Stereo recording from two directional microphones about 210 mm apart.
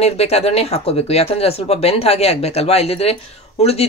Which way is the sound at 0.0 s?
30° left (ahead or behind).